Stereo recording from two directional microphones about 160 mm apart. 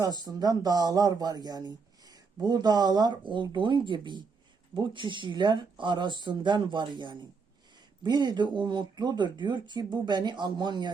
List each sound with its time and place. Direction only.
0.0 s speech: 25° right (ahead or behind)